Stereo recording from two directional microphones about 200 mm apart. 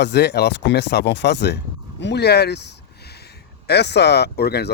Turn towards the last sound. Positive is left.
turn(degrees=55)  # may be behind; listen again after turning